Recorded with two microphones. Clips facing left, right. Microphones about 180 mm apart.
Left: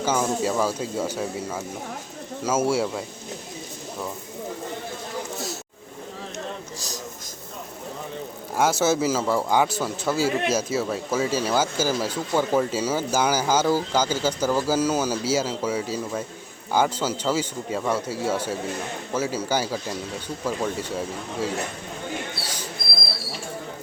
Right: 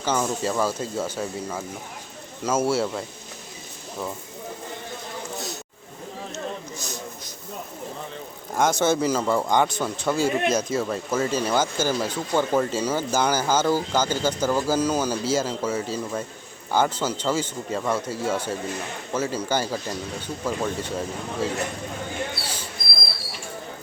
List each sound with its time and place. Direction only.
0.0 s a man's voice: 10° left (ahead or behind)
6.7 s a sound: 35° left (ahead or behind)
8.5 s a man's voice: 5° left (ahead or behind)